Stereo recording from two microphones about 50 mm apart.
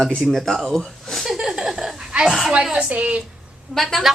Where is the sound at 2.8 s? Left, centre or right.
Right.